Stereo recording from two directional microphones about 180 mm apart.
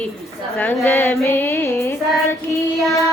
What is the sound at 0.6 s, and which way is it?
Music, 10° left (ahead or behind).